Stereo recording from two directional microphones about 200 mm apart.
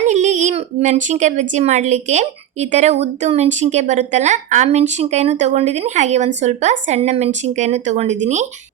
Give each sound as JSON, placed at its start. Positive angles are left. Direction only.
{"t": 0.0, "sound": "speech", "side_deg": -35}